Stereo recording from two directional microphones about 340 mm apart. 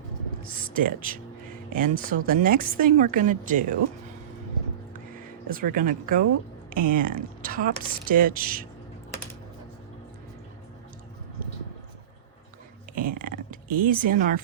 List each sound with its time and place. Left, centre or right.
0.7 s a woman's voice: right
5.5 s a woman's voice: right
13.0 s speech: right